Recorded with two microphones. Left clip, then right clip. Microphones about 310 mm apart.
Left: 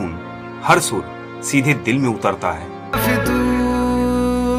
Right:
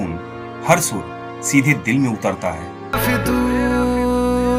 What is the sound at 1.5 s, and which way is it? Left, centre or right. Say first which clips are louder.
Speech: right 1 dB; left.